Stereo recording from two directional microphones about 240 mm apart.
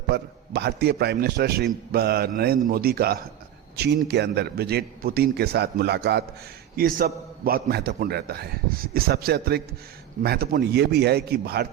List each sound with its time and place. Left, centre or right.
0.1 s a man's voice: right